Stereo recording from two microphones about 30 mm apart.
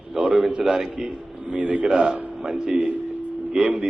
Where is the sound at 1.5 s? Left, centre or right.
Right.